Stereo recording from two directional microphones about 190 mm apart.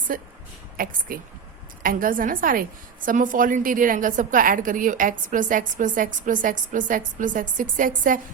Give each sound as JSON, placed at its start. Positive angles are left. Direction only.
{"t": 0.1, "sound": "a woman's voice", "side_deg": -50}